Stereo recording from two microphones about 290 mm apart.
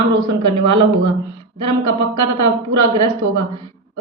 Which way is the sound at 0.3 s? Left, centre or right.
Right.